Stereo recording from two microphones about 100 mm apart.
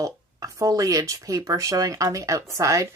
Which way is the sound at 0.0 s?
35° right (ahead or behind).